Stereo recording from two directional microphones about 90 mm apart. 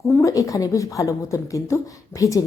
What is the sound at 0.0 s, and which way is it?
Speech, 35° left (ahead or behind).